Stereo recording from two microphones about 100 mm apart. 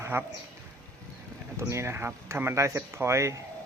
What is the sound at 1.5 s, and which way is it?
Speech, 30° right (ahead or behind).